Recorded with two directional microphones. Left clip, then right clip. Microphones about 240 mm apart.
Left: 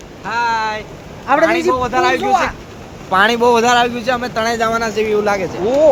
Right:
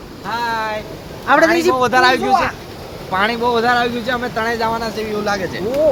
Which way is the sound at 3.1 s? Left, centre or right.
Left.